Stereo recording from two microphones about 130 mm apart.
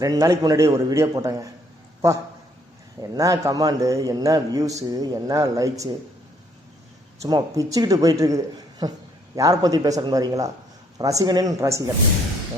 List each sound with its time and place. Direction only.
0.0 s a man's voice: 25° right (ahead or behind)
3.0 s a man's voice: 25° right (ahead or behind)
7.2 s a man's voice: 30° right (ahead or behind)